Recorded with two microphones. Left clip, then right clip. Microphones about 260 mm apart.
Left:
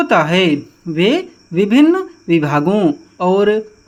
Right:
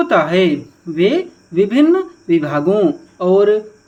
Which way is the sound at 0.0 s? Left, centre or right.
Left.